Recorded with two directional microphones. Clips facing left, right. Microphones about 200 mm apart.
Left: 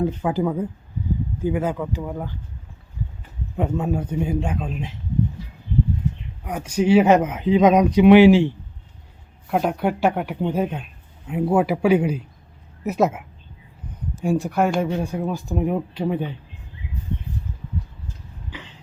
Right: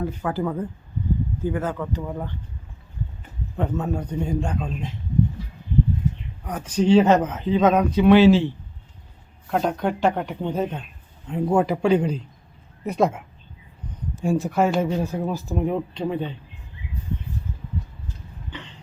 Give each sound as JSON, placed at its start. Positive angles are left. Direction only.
{"t": 0.0, "sound": "speech", "side_deg": 15}
{"t": 3.6, "sound": "speech", "side_deg": 10}
{"t": 6.4, "sound": "speech", "side_deg": 10}